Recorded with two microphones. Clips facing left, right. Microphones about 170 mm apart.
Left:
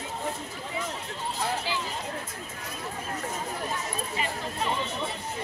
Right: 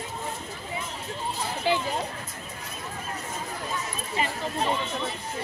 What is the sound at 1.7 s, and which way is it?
Speech, 55° right (ahead or behind).